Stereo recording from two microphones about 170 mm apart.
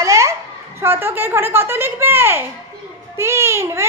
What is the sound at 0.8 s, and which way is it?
A child's voice, 15° right (ahead or behind).